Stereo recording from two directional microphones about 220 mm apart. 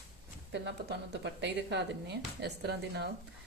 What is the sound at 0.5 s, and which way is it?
Speech, 50° right (ahead or behind).